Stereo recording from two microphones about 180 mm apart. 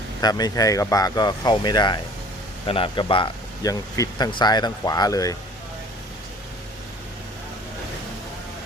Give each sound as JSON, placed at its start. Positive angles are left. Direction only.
{"t": 0.2, "sound": "speech", "side_deg": 20}